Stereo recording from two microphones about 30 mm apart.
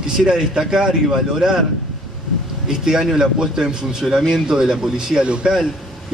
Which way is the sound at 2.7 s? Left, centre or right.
Right.